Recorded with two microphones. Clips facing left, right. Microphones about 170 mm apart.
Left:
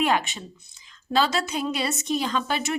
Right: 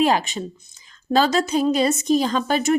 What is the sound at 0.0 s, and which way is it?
A woman's voice, 35° right (ahead or behind).